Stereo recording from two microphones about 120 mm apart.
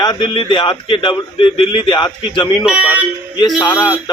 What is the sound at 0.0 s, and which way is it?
A man's voice, 40° left (ahead or behind).